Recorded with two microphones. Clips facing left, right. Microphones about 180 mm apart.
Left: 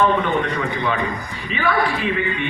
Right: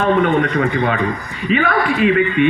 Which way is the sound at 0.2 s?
60° right (ahead or behind).